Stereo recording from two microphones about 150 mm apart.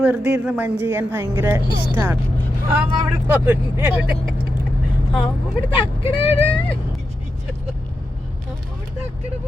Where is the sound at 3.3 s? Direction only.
10° right (ahead or behind).